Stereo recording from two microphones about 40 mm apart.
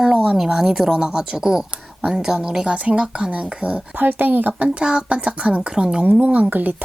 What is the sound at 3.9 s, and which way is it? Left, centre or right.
Speech, right.